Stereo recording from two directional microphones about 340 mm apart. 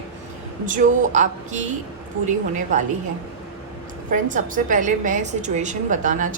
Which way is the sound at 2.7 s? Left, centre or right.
Right.